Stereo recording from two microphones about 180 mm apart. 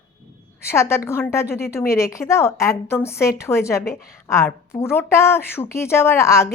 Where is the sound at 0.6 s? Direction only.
15° left (ahead or behind).